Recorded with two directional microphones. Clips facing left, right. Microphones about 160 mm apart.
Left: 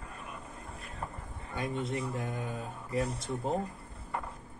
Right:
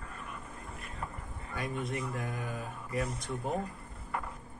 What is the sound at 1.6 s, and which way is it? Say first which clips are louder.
Speech: left 2 dB; 25° left (ahead or behind).